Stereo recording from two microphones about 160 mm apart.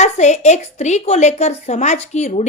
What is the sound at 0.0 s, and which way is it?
A woman's voice, 45° left (ahead or behind).